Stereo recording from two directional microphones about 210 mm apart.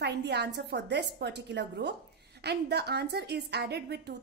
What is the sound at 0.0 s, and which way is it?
A woman's voice, 50° right (ahead or behind).